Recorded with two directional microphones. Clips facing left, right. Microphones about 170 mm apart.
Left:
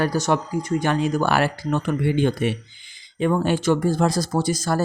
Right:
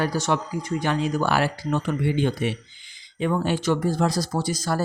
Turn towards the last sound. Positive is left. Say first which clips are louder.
# left 3 dB
turn(degrees=50)  # may be behind; listen again after turning